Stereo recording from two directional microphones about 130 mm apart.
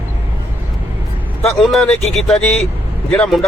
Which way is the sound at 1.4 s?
Centre (ahead or behind).